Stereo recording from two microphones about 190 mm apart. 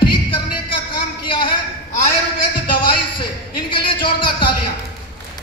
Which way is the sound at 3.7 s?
25° left (ahead or behind).